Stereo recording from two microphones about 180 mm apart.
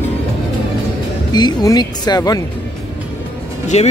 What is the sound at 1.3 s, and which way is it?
Speech, 20° left (ahead or behind).